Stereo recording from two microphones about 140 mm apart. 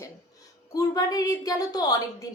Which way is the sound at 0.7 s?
25° left (ahead or behind).